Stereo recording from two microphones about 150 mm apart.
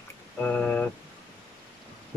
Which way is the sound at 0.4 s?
10° left (ahead or behind).